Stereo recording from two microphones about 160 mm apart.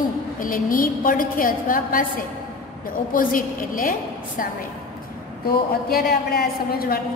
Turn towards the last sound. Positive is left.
turn(degrees=70)  # may be behind; listen again after turning